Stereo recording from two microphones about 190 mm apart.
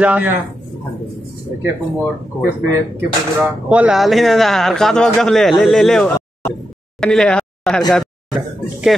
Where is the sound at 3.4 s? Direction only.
5° right (ahead or behind).